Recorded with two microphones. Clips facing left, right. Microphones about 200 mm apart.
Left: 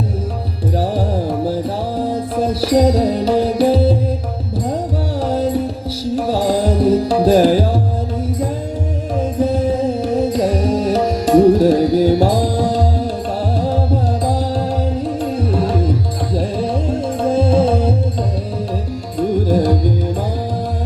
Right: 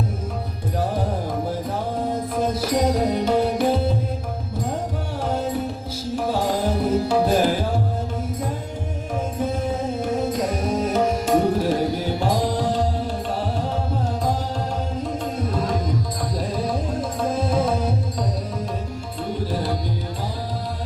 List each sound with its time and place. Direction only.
0.8 s music: 35° left (ahead or behind)
5.2 s music: 35° left (ahead or behind)
9.4 s music: 35° left (ahead or behind)
15.0 s music: 35° left (ahead or behind)
19.5 s music: 45° left (ahead or behind)